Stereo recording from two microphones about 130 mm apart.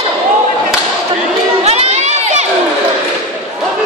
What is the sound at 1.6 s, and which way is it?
Crowd, 55° right (ahead or behind).